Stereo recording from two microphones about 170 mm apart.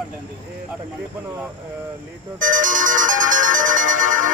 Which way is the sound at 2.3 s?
50° right (ahead or behind).